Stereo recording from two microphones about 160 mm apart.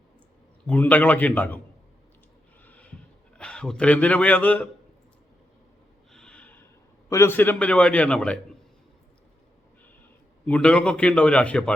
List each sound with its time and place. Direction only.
0.7 s a man's voice: 10° left (ahead or behind)
2.6 s a sound: 10° left (ahead or behind)
3.3 s a man's voice: 5° left (ahead or behind)
6.1 s snort: 5° left (ahead or behind)
7.1 s a man's voice: 15° left (ahead or behind)
10.4 s a man's voice: 5° left (ahead or behind)